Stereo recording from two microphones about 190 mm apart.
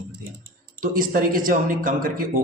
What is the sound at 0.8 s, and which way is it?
A man's voice, 45° right (ahead or behind).